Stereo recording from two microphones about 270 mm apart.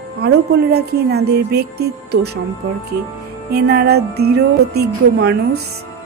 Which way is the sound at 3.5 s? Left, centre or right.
Right.